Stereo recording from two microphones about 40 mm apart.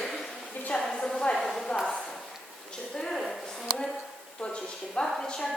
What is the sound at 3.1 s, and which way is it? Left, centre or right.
Speech, centre.